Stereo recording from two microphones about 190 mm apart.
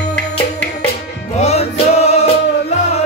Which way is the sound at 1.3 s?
35° left (ahead or behind).